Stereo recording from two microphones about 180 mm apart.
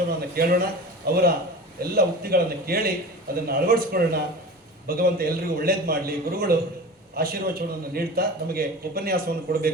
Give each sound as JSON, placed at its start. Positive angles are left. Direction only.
{"t": 0.3, "sound": "a man's voice", "side_deg": -55}